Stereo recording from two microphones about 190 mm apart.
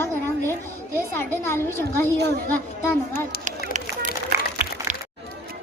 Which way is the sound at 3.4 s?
40° right (ahead or behind).